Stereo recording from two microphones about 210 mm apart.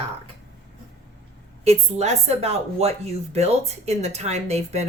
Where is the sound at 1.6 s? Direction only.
30° right (ahead or behind).